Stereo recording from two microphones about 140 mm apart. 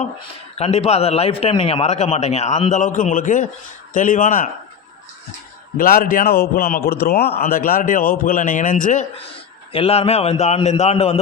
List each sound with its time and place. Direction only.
0.2 s a man's voice: 45° left (ahead or behind); by 4.4 s 70° left (ahead or behind)
5.7 s a man's voice: 90° left; by 9.0 s 65° left (ahead or behind)
9.7 s a man's voice: 45° left (ahead or behind)